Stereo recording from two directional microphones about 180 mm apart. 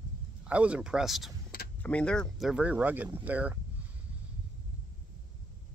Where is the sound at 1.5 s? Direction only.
55° left (ahead or behind).